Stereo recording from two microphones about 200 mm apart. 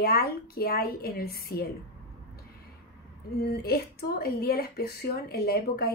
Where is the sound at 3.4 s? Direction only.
50° left (ahead or behind).